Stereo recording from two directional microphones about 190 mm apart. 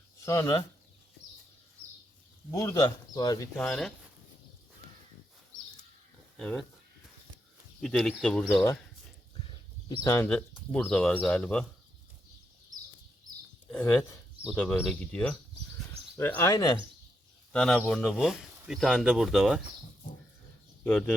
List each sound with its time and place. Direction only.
0.3 s speech: 20° left (ahead or behind)
2.5 s speech: 20° left (ahead or behind)
3.7 s speech: centre (ahead or behind)
6.3 s speech: 5° left (ahead or behind)
7.8 s speech: 5° left (ahead or behind)
9.9 s speech: 20° left (ahead or behind)
10.2 s speech: 5° left (ahead or behind)
13.7 s speech: 10° left (ahead or behind)
17.5 s speech: 5° left (ahead or behind)